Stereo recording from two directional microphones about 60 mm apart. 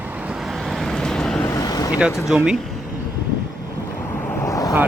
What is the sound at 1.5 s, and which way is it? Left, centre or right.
Vehicle, left.